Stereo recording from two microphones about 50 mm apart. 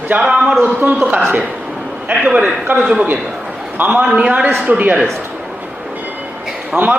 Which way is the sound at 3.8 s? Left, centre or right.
Right.